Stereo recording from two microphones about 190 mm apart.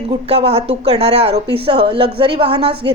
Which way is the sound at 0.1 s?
30° right (ahead or behind).